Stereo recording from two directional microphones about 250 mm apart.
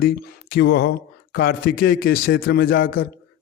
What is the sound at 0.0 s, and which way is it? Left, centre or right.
A man's voice, left.